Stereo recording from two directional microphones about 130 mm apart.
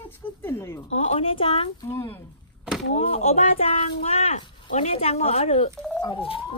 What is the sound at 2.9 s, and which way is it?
Speech, 55° left (ahead or behind).